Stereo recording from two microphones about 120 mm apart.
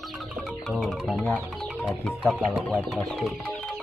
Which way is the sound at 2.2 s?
5° right (ahead or behind).